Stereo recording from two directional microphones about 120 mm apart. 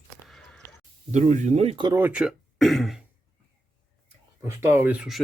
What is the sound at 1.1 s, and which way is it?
Speech, 90° right.